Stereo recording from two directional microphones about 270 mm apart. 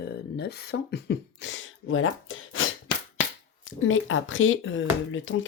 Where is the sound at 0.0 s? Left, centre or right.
Left.